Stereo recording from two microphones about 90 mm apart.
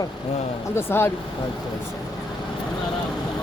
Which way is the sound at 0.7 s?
25° left (ahead or behind).